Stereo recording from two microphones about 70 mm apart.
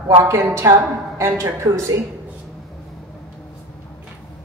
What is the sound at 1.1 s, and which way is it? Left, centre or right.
Speech, right.